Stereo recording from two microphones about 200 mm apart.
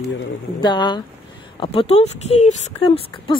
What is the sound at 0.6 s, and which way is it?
Speech, 20° left (ahead or behind).